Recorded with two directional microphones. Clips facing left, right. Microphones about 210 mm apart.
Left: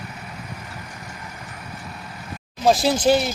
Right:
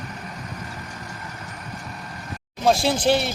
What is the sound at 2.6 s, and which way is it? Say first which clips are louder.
Speech: left 2 dB; centre (ahead or behind).